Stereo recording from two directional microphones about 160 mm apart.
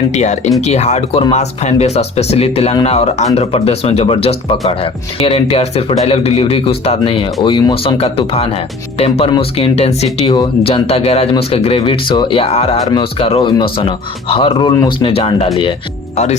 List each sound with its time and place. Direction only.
0.1 s speech: 45° left (ahead or behind)